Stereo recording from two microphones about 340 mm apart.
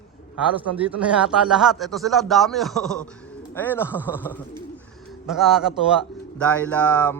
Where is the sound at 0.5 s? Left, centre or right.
Centre.